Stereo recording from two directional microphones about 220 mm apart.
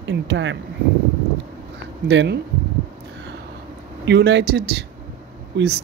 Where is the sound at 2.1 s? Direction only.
50° right (ahead or behind).